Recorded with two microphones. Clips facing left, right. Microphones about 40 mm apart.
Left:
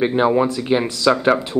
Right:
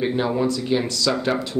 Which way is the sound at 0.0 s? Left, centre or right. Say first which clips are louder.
Left 5 dB; left.